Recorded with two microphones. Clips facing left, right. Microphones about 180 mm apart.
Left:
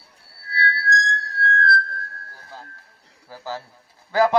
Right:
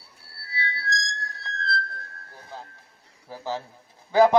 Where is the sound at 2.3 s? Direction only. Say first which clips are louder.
Right 1 dB; 20° right (ahead or behind).